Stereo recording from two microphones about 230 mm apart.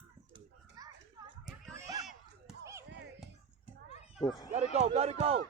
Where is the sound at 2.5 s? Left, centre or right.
Centre.